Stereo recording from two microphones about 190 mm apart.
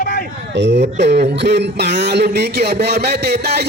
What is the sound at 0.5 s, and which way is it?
Speech, 65° right (ahead or behind).